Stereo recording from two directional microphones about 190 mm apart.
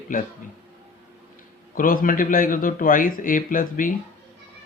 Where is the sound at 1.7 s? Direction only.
45° left (ahead or behind).